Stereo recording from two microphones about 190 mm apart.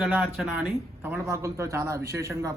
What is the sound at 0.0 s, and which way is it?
Speech, 5° right (ahead or behind).